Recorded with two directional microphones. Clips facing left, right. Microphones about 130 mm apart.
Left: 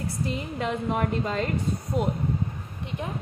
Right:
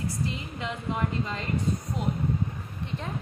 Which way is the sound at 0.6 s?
55° left (ahead or behind).